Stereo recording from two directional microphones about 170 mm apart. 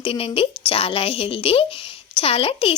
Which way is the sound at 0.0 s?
35° left (ahead or behind).